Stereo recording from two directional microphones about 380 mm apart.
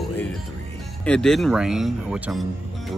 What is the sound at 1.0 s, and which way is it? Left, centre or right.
Speech, centre.